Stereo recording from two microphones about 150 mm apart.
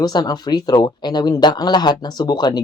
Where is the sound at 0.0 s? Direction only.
25° left (ahead or behind).